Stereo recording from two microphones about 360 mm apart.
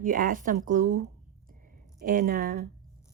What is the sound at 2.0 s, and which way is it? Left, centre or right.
Speech, right.